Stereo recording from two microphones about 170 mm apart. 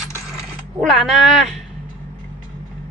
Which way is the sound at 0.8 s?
Centre (ahead or behind).